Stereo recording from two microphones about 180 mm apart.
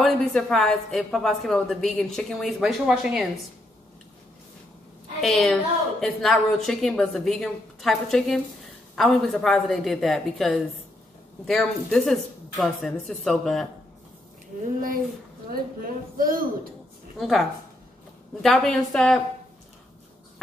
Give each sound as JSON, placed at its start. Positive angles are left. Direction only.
{"t": 0.0, "sound": "a woman's voice", "side_deg": 5}
{"t": 5.2, "sound": "a woman's voice", "side_deg": 0}
{"t": 15.5, "sound": "a woman's voice", "side_deg": -50}
{"t": 17.2, "sound": "a woman's voice", "side_deg": 0}